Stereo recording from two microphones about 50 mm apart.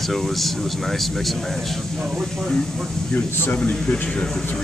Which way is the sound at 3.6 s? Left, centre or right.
Left.